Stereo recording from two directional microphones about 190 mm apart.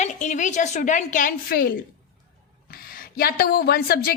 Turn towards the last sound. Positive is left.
turn(degrees=55)  # may be behind; listen again after turning